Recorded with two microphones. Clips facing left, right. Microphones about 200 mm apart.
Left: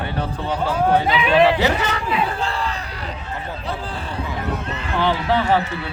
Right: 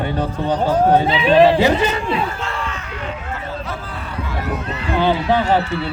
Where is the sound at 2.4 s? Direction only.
30° left (ahead or behind).